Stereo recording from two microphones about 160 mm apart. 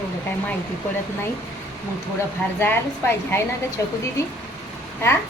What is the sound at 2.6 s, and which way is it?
A woman's voice, 15° left (ahead or behind).